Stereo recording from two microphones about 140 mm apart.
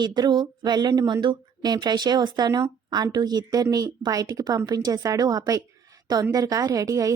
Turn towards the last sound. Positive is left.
turn(degrees=-25)  # may be behind; listen again after turning